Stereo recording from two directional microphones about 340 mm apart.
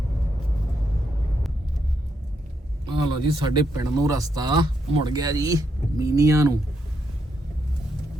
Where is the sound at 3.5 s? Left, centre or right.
Centre.